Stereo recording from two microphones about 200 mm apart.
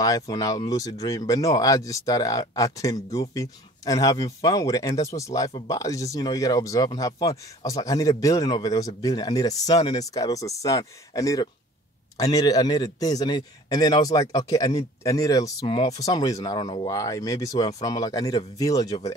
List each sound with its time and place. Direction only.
0.0 s a man's voice: 20° left (ahead or behind)